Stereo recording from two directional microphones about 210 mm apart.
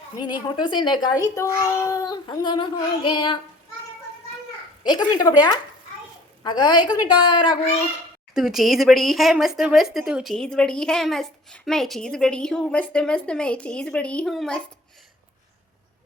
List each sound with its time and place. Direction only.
0.2 s a child's voice: 20° left (ahead or behind)
4.8 s a child's voice: 20° left (ahead or behind)
8.4 s speech: centre (ahead or behind)